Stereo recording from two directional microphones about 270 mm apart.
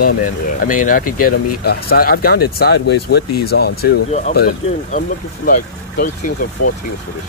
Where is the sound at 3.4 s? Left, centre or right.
Left.